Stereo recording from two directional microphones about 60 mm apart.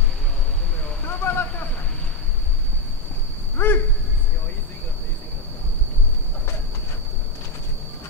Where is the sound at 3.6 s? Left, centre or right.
Left.